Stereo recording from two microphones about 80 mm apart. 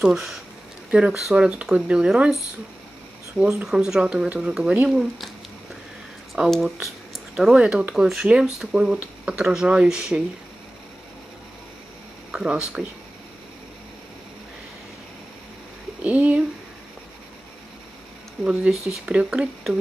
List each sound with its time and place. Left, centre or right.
0.0 s speech: centre
3.3 s speech: centre
6.5 s speech: centre
7.5 s speech: centre
12.3 s speech: centre
16.0 s speech: centre
18.4 s speech: centre